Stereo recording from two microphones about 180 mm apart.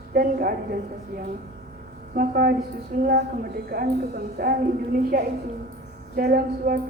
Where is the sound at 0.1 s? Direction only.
55° right (ahead or behind).